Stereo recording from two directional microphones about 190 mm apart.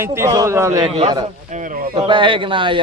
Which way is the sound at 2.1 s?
25° right (ahead or behind).